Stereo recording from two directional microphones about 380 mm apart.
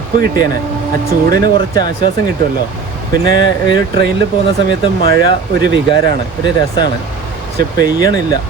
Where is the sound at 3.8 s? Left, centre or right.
Right.